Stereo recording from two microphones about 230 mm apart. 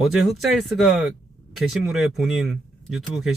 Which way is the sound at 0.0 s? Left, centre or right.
Centre.